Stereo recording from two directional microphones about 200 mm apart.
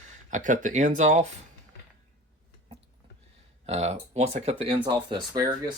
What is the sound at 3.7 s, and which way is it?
Speech, 30° right (ahead or behind).